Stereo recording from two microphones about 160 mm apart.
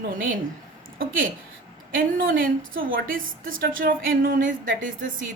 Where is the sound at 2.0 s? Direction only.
65° right (ahead or behind).